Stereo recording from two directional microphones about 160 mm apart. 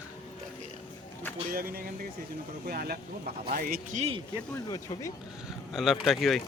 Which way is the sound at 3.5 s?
65° right (ahead or behind).